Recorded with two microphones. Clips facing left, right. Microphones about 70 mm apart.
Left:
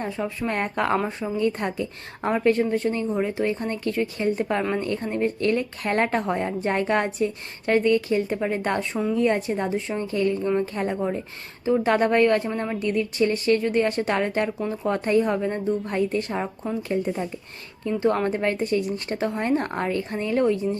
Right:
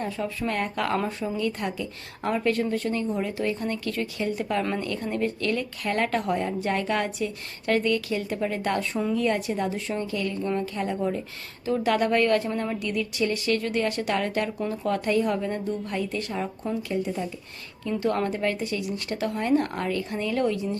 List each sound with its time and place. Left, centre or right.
0.0 s speech: left